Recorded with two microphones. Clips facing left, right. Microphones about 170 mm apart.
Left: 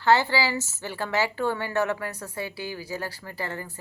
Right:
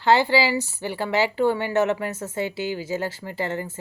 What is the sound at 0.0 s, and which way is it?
A woman's voice, 15° right (ahead or behind).